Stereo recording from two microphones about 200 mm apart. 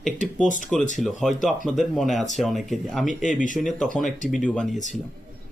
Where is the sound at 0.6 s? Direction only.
Centre (ahead or behind).